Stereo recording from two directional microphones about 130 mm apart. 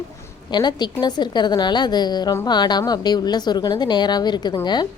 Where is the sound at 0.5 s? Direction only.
35° left (ahead or behind).